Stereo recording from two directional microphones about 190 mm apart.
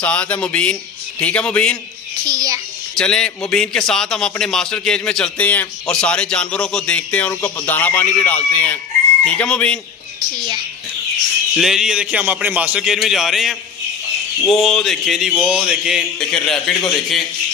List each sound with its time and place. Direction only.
0.0 s a man's voice: 5° left (ahead or behind)
2.2 s a sound: 20° right (ahead or behind)
2.9 s a man's voice: 5° left (ahead or behind)
10.3 s a woman's voice: 25° right (ahead or behind)
11.5 s a man's voice: centre (ahead or behind)